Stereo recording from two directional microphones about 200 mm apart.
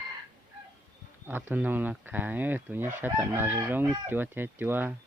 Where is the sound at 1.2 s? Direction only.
10° right (ahead or behind).